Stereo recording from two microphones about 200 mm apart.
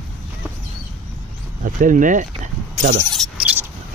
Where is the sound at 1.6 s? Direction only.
40° right (ahead or behind).